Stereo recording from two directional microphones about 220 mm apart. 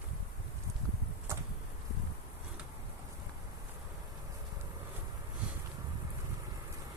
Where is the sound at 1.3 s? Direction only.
10° right (ahead or behind).